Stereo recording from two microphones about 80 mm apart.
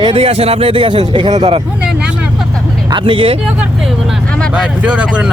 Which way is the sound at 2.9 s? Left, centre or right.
Right.